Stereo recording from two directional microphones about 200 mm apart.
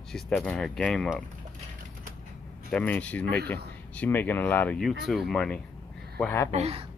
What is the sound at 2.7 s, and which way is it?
Speech, 5° left (ahead or behind).